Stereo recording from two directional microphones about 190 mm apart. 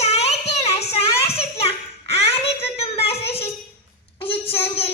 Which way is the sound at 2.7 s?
30° left (ahead or behind).